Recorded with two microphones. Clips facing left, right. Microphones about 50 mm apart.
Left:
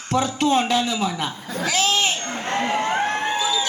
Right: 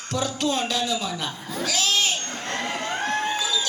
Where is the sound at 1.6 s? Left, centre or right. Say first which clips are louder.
Left 3 dB; left.